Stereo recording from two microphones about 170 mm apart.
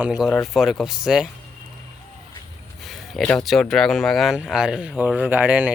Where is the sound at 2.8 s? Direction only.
Centre (ahead or behind).